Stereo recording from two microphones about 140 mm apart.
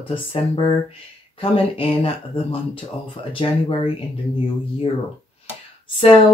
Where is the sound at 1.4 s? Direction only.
40° left (ahead or behind).